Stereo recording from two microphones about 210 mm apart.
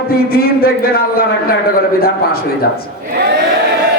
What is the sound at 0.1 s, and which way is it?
Speech, 45° left (ahead or behind).